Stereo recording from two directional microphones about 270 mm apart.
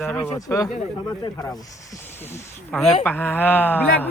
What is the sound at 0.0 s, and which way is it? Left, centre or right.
Speech, centre.